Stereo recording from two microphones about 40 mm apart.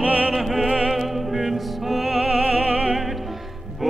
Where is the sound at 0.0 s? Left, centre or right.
Right.